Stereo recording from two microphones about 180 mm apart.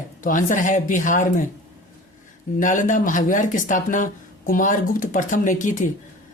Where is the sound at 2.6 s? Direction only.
45° left (ahead or behind).